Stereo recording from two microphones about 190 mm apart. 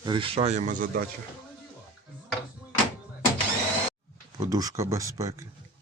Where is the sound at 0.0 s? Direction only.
25° right (ahead or behind); by 1.0 s 45° right (ahead or behind).